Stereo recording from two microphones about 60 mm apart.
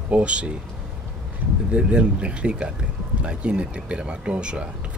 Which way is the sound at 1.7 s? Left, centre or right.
Centre.